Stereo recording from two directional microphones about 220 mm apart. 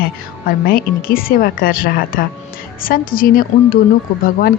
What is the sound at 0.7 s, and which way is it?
A woman's voice, 40° left (ahead or behind).